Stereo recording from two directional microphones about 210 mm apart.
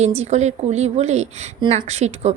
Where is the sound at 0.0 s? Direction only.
30° right (ahead or behind).